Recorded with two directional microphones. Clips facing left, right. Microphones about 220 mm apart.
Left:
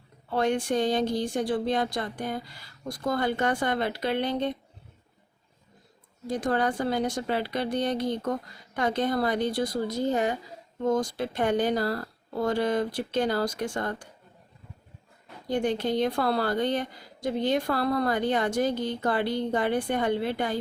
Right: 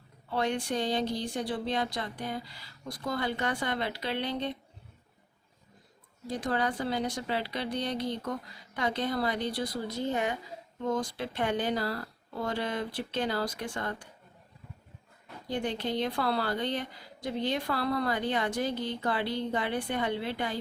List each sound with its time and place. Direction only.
0.3 s a woman's voice: 50° left (ahead or behind)
6.2 s a woman's voice: 50° left (ahead or behind)
15.4 s a woman's voice: 45° left (ahead or behind)